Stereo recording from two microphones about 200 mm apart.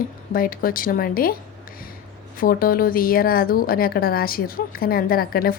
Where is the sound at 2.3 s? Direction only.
45° left (ahead or behind).